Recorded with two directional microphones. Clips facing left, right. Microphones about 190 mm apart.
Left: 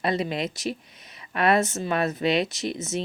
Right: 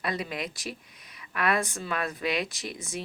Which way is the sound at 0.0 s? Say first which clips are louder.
Left 6 dB; 25° left (ahead or behind).